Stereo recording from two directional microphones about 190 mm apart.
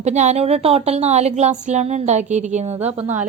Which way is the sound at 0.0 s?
35° right (ahead or behind).